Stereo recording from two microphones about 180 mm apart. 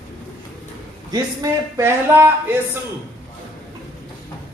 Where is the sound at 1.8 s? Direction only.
15° right (ahead or behind).